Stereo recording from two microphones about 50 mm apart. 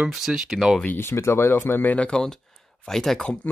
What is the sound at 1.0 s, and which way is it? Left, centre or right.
Speech, left.